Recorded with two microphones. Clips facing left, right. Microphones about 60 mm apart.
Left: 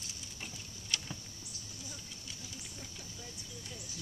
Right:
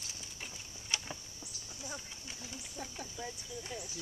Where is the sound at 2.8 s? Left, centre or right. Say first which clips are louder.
Right 6 dB; right.